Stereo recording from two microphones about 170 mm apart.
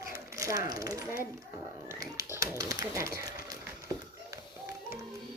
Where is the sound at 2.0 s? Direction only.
20° right (ahead or behind).